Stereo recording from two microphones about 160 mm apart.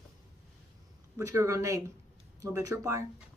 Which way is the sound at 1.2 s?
20° right (ahead or behind).